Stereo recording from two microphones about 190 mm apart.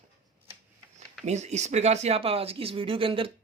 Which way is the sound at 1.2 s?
35° right (ahead or behind).